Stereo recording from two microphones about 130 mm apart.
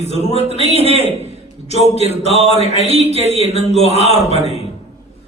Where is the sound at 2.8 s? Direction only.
50° right (ahead or behind).